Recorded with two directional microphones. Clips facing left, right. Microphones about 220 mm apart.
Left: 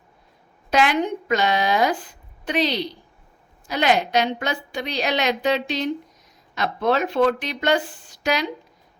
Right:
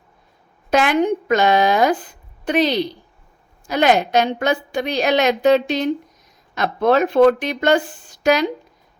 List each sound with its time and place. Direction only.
0.7 s a woman's voice: 50° right (ahead or behind)